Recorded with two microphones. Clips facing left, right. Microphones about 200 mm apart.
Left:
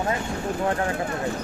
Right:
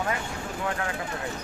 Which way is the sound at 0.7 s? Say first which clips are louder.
Left 5 dB; 35° left (ahead or behind).